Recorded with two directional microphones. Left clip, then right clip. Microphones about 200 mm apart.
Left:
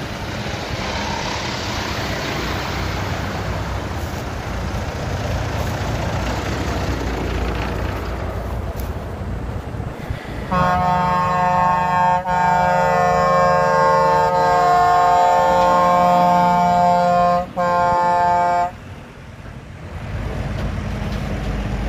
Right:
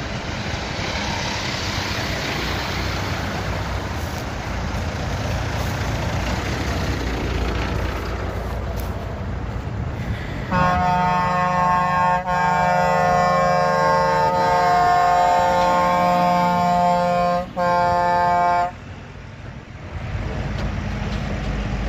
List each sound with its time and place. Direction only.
10.5 s vehicle: centre (ahead or behind)
11.1 s alarm: 5° left (ahead or behind)
11.4 s alarm: 20° left (ahead or behind)
12.1 s siren: 20° left (ahead or behind)
13.0 s a sound: 10° left (ahead or behind); by 18.7 s 35° right (ahead or behind)